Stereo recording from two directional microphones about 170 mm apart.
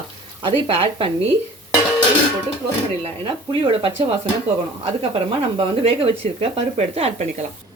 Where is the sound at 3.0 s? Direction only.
30° right (ahead or behind).